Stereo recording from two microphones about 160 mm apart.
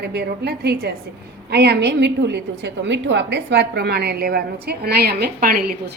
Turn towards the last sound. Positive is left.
turn(degrees=-65)  # may be behind; listen again after turning